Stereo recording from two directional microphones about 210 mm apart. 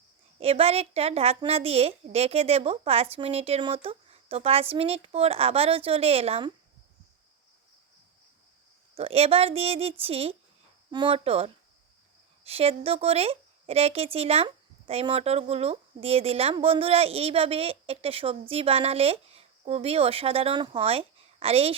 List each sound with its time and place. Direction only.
0.3 s speech: 30° right (ahead or behind)
9.0 s speech: 25° right (ahead or behind)